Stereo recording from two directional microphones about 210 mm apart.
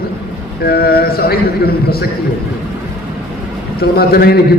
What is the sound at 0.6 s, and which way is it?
A man's voice, 45° left (ahead or behind).